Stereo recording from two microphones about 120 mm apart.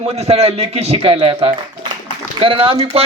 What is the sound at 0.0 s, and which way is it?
A man's voice, 60° right (ahead or behind).